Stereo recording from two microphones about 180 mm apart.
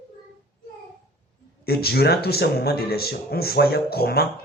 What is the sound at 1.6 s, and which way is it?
Speech, 60° left (ahead or behind).